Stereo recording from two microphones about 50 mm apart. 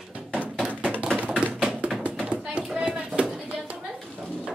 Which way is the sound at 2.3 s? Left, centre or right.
Right.